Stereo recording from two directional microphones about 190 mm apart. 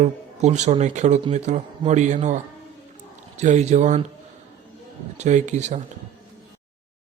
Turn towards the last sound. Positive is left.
turn(degrees=-40)  # may be behind; listen again after turning